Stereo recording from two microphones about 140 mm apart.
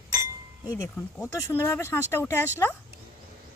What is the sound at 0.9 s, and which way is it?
Speech, 15° left (ahead or behind).